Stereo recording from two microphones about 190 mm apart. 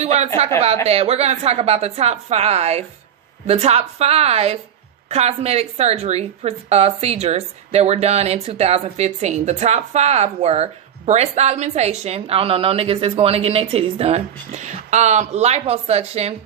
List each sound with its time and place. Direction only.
0.0 s a woman's voice: 35° right (ahead or behind)